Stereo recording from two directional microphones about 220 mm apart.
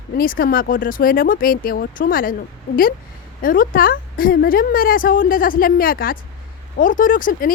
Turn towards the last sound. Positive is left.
turn(degrees=40)  # may be behind; listen again after turning